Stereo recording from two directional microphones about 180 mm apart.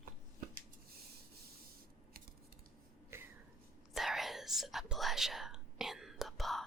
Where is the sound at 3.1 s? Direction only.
15° right (ahead or behind).